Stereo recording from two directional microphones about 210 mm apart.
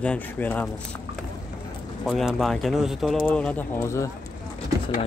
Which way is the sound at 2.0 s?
Centre (ahead or behind).